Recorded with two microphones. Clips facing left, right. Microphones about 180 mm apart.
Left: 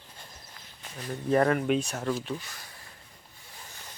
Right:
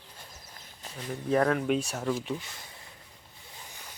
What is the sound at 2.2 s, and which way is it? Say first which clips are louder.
Speech: right 1 dB; 20° right (ahead or behind).